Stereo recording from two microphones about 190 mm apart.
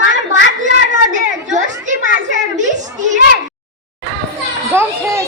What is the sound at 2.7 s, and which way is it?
Speech, 40° right (ahead or behind).